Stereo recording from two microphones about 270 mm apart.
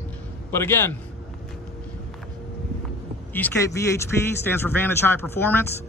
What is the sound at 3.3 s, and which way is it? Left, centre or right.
A man's voice, centre.